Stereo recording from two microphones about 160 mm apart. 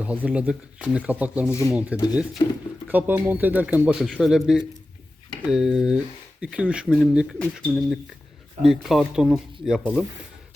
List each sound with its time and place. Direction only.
0.0 s speech: 10° right (ahead or behind)
2.4 s speech: 25° left (ahead or behind)
2.8 s speech: 10° right (ahead or behind)